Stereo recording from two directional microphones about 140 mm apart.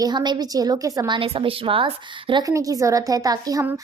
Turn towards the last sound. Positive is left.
turn(degrees=-25)  # may be behind; listen again after turning